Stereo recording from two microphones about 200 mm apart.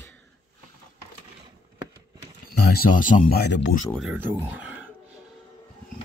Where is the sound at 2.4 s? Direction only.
45° left (ahead or behind).